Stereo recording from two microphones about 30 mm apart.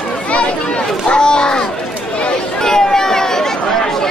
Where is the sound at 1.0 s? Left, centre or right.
Left.